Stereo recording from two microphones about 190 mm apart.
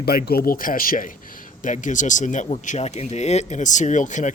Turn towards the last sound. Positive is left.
turn(degrees=40)  # may be behind; listen again after turning